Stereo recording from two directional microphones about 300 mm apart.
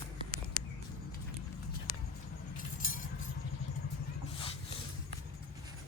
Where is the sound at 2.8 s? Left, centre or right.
Left.